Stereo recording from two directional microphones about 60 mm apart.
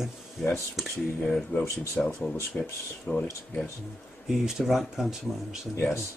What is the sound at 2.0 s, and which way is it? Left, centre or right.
Speech, centre.